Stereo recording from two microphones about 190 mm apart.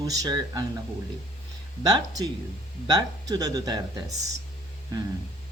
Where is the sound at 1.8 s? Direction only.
20° right (ahead or behind).